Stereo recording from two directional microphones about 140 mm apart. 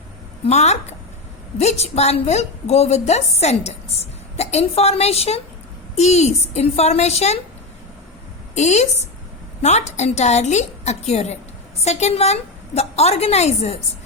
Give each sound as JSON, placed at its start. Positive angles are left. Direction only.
{"t": 0.4, "sound": "a woman's voice", "side_deg": 55}
{"t": 8.5, "sound": "a woman's voice", "side_deg": 55}